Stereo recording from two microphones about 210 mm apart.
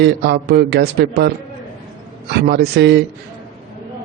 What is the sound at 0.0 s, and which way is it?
A man's voice, 50° right (ahead or behind).